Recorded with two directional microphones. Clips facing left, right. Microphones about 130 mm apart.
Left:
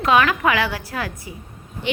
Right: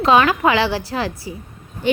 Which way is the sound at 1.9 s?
40° right (ahead or behind).